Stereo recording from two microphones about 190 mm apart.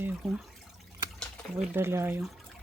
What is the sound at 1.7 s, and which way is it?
Speech, 10° right (ahead or behind).